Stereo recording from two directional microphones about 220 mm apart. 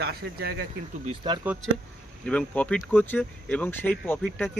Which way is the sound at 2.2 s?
5° left (ahead or behind).